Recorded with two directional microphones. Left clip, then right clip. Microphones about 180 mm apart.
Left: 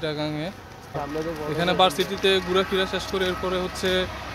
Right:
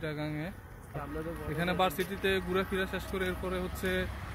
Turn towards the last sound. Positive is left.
turn(degrees=0)  # may be behind; listen again after turning